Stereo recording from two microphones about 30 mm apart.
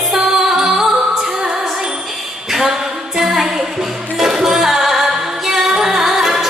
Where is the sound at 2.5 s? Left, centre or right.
Centre.